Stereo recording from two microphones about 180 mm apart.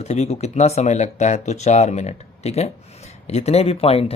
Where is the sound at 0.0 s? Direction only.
35° left (ahead or behind).